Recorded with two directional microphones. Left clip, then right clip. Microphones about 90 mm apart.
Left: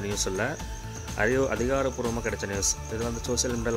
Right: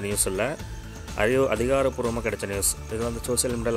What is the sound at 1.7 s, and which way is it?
Speech, 40° right (ahead or behind).